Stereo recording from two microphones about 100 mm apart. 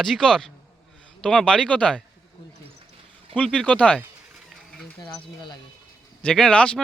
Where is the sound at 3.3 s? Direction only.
5° left (ahead or behind).